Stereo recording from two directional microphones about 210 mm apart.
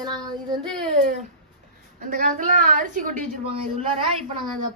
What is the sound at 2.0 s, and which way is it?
A woman's voice, 40° right (ahead or behind).